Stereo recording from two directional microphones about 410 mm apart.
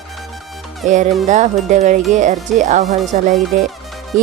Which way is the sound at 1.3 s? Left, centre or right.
Centre.